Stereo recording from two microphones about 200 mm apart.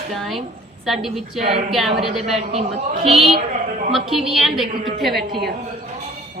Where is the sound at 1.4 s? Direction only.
30° right (ahead or behind).